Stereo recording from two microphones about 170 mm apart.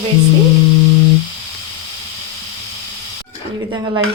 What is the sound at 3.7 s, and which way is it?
Stir, 20° right (ahead or behind).